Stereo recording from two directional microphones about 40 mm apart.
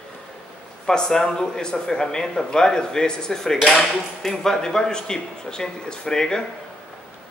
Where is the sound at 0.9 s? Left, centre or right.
Centre.